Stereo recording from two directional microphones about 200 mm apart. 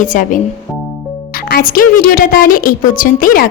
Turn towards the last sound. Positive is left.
turn(degrees=45)  # may be behind; listen again after turning